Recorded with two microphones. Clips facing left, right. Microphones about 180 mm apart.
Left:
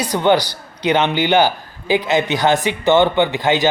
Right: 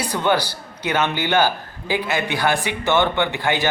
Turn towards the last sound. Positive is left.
turn(degrees=15)  # may be behind; listen again after turning